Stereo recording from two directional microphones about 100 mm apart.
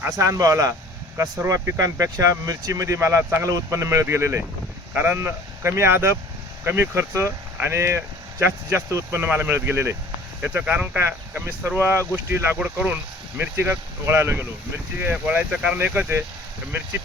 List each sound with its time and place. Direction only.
0.0 s speech: 30° right (ahead or behind); by 13.0 s 15° right (ahead or behind)
14.1 s speech: 25° right (ahead or behind)